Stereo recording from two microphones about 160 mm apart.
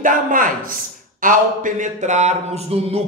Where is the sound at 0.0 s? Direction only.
55° right (ahead or behind).